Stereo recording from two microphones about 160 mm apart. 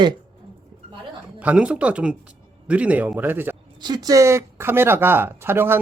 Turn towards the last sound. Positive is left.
turn(degrees=-15)  # may be behind; listen again after turning